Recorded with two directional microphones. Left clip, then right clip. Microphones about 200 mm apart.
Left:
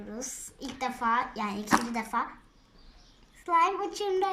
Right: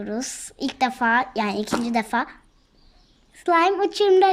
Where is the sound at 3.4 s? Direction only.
45° right (ahead or behind).